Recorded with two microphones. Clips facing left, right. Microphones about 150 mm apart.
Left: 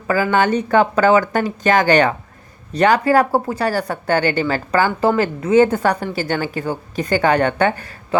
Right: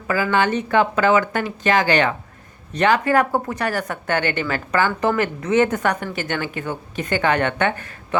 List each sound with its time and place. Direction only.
0.1 s speech: 40° left (ahead or behind)